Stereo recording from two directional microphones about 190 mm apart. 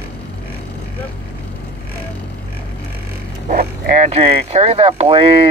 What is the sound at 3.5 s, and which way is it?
Speech, 45° right (ahead or behind).